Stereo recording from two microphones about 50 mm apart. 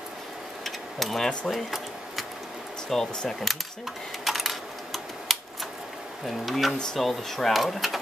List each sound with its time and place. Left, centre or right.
0.7 s a sound: centre
2.9 s speech: centre
4.2 s coin: centre
6.2 s speech: centre